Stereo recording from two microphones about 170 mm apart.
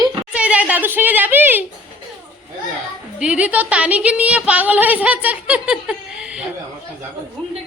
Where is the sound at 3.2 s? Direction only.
5° right (ahead or behind).